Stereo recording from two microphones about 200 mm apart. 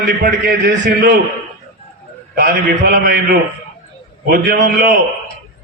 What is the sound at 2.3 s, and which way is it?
A man's voice, 50° right (ahead or behind).